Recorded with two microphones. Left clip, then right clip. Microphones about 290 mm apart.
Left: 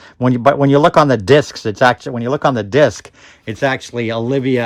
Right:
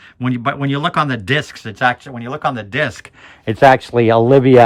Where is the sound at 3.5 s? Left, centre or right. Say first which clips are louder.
Right 8 dB; centre.